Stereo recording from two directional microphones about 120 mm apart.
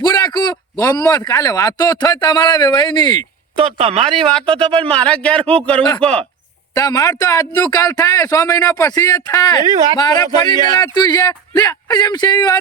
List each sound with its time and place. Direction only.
0.0 s speech: 35° left (ahead or behind)
3.6 s speech: 55° right (ahead or behind)
4.4 s speech: 45° right (ahead or behind)
4.8 s a man's voice: 10° left (ahead or behind)
6.7 s speech: 30° left (ahead or behind)